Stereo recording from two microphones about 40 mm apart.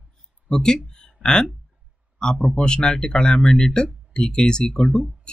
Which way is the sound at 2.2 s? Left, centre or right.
Centre.